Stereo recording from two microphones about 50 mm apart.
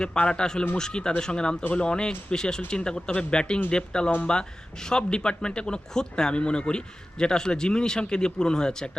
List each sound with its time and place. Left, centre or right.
0.0 s speech: centre